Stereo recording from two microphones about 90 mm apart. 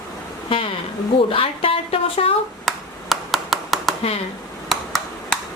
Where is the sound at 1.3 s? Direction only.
90° left.